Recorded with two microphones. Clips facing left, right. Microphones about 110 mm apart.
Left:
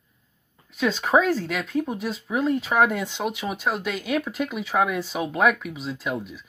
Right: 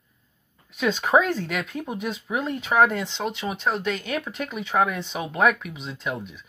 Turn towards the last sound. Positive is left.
turn(degrees=0)  # may be behind; listen again after turning